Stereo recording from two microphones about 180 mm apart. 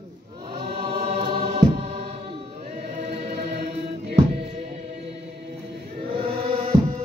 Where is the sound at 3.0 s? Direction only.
35° right (ahead or behind).